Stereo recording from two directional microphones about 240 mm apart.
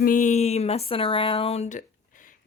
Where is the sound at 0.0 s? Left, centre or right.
Left.